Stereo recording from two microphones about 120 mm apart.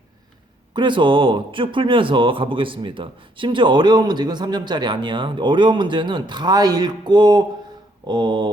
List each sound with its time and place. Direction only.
0.7 s speech: 40° right (ahead or behind)